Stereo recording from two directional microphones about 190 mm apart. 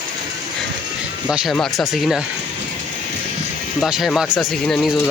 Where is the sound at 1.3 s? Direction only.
Centre (ahead or behind).